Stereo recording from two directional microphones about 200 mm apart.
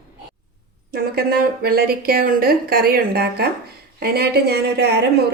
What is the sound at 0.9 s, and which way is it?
Speech, 50° right (ahead or behind).